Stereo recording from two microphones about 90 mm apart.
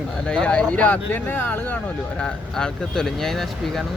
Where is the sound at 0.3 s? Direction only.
10° left (ahead or behind).